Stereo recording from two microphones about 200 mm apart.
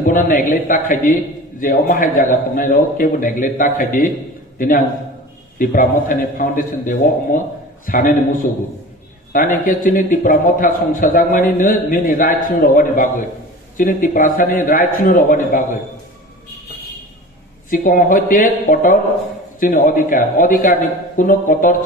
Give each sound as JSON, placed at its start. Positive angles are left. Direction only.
{"t": 0.0, "sound": "a man's voice", "side_deg": 40}
{"t": 17.6, "sound": "a man's voice", "side_deg": 45}